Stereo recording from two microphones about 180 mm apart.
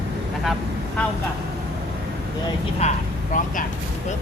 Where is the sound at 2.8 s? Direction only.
35° left (ahead or behind).